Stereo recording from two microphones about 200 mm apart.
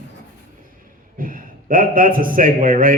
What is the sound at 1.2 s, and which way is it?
A man's voice, 45° right (ahead or behind).